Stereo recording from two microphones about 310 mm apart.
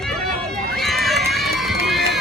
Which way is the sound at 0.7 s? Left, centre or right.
Centre.